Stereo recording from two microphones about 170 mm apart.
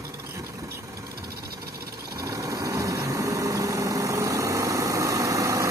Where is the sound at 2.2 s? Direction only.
20° right (ahead or behind).